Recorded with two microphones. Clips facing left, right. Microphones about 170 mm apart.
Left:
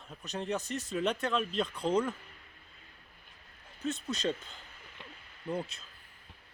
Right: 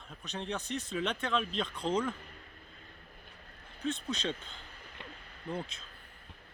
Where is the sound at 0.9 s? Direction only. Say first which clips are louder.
Left 2 dB; 5° left (ahead or behind).